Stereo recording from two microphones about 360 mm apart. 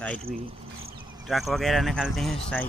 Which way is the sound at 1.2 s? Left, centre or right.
Centre.